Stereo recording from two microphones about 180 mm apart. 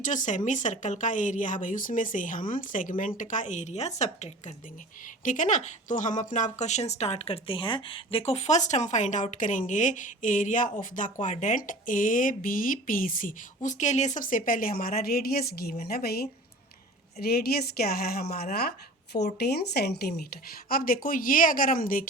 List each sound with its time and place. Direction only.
0.0 s speech: 45° left (ahead or behind)